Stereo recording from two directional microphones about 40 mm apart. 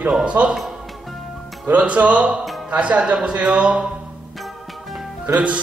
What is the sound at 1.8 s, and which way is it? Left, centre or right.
Speech, right.